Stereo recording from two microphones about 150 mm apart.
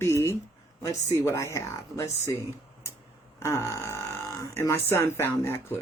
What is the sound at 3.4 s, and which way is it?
Speech, 20° left (ahead or behind).